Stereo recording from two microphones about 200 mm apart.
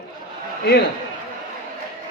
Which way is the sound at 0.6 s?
55° left (ahead or behind).